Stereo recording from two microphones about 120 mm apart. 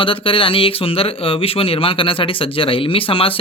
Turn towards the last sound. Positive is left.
turn(degrees=50)  # may be behind; listen again after turning